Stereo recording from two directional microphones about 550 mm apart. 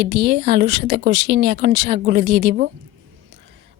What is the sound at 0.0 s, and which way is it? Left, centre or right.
A woman's voice, centre.